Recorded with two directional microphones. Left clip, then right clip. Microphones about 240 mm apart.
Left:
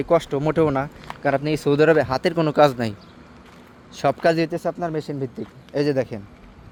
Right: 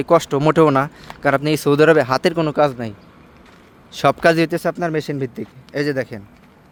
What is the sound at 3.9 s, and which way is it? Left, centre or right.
Speech, centre.